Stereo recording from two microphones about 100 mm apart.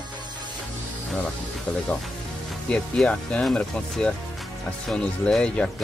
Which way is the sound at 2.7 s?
10° left (ahead or behind).